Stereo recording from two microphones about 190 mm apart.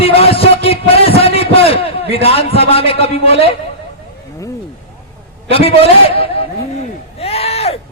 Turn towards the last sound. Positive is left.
turn(degrees=30)  # may be behind; listen again after turning